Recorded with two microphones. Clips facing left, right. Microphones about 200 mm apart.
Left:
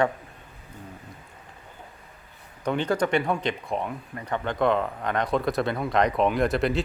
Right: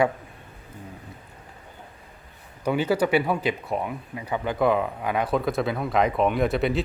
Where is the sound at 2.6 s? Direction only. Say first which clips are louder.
Right 2 dB; 5° right (ahead or behind).